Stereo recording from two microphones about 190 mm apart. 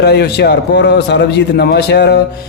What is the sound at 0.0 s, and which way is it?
A man's voice, 60° left (ahead or behind).